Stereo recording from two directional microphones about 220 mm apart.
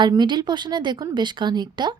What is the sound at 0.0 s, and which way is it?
A woman's voice, 20° right (ahead or behind).